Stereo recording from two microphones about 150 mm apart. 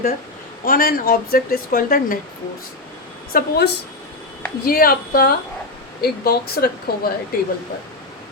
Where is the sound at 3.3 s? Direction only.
80° left.